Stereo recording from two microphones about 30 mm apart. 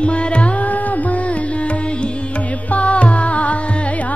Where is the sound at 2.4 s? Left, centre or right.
Left.